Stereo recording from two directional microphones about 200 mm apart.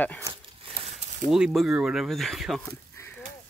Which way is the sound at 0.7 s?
25° right (ahead or behind).